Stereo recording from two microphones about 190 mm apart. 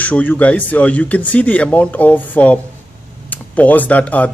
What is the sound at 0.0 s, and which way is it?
Speech, 10° left (ahead or behind).